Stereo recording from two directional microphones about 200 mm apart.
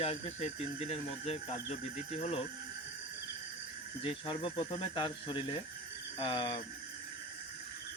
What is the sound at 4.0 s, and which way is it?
Speech, 25° left (ahead or behind).